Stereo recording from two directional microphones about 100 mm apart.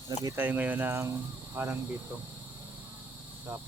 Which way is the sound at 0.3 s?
15° right (ahead or behind).